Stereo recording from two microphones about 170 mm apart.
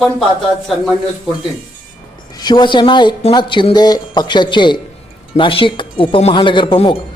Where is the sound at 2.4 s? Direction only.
25° left (ahead or behind).